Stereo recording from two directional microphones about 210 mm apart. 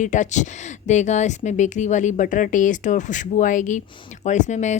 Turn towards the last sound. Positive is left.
turn(degrees=35)  # may be behind; listen again after turning